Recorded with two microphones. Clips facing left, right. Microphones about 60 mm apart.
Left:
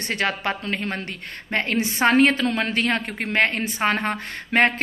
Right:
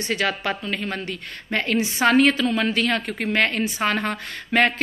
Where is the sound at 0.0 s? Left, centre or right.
Left.